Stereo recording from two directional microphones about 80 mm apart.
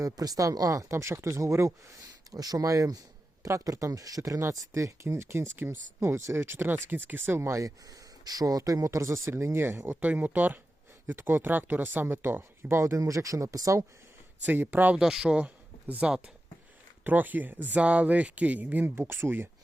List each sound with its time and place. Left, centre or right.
0.0 s speech: right
2.3 s speech: right
7.3 s speech: right
14.4 s speech: right
14.9 s speech: centre; by 19.5 s right